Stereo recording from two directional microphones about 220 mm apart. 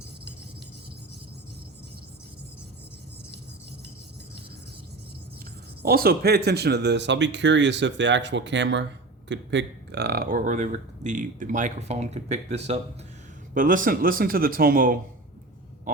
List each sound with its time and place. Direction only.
5.8 s speech: 45° right (ahead or behind)